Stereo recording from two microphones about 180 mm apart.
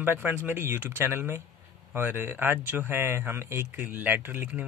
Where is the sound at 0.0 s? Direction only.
10° right (ahead or behind).